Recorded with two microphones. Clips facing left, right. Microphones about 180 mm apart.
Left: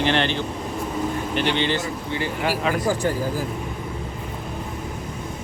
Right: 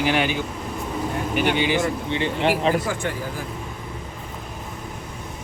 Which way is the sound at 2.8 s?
35° left (ahead or behind).